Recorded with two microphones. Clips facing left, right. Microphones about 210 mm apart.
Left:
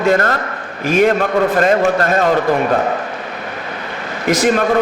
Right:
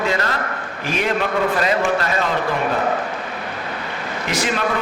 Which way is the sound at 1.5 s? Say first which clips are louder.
Left 6 dB; 50° left (ahead or behind).